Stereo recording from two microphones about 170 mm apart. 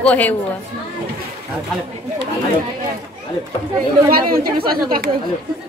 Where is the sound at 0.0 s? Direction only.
10° left (ahead or behind).